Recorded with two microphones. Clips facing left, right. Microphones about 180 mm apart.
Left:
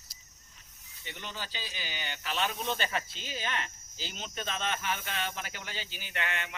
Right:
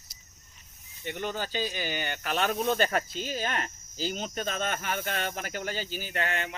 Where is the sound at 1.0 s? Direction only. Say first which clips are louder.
Right 9 dB; 50° right (ahead or behind).